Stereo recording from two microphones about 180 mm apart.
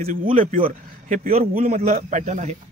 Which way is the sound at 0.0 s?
50° right (ahead or behind).